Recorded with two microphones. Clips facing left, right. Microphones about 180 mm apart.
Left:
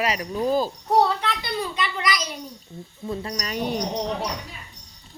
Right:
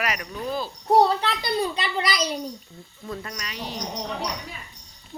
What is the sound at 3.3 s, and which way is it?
Speech, 45° left (ahead or behind).